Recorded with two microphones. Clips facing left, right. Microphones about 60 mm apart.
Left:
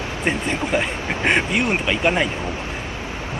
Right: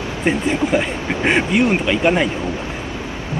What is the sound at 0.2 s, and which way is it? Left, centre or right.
Speech, centre.